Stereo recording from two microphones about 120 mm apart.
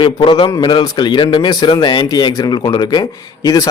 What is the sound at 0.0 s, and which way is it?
A man's voice, 45° left (ahead or behind).